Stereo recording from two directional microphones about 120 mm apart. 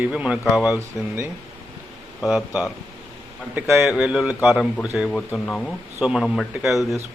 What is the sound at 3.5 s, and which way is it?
Speech, 20° right (ahead or behind).